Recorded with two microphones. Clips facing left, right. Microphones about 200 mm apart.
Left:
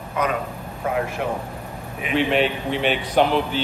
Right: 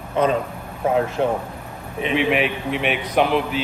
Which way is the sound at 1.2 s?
30° right (ahead or behind).